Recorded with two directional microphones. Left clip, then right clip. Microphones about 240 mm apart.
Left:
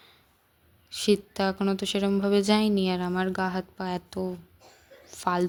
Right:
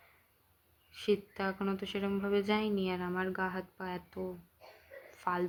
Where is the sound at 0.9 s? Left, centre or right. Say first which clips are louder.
Left 8 dB; left.